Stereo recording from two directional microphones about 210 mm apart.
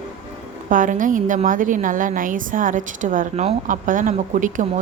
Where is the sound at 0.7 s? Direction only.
40° right (ahead or behind).